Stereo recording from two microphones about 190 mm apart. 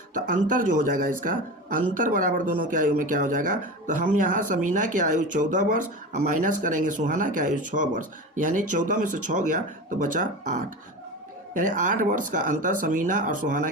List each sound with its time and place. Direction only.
0.1 s speech: 45° right (ahead or behind)